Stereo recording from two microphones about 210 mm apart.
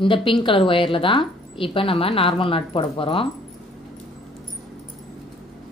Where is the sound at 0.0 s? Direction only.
25° left (ahead or behind).